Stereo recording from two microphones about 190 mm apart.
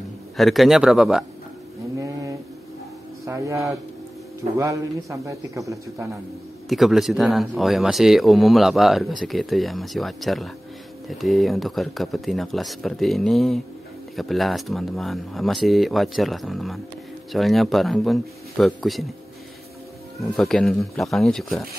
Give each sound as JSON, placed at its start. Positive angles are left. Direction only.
{"t": 0.4, "sound": "speech", "side_deg": 0}
{"t": 3.3, "sound": "a man's voice", "side_deg": -15}
{"t": 6.7, "sound": "speech", "side_deg": 0}
{"t": 20.3, "sound": "speech", "side_deg": 5}